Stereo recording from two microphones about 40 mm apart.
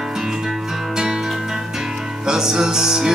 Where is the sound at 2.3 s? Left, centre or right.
Centre.